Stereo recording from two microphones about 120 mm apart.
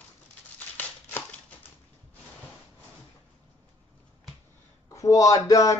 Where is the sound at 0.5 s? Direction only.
15° left (ahead or behind).